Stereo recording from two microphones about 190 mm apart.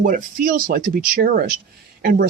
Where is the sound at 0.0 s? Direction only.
45° right (ahead or behind).